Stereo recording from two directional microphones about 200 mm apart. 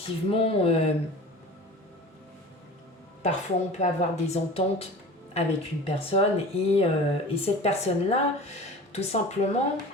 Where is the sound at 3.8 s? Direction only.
35° left (ahead or behind).